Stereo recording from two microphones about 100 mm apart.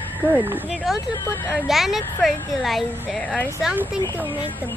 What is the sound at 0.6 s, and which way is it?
A woman's voice, centre (ahead or behind).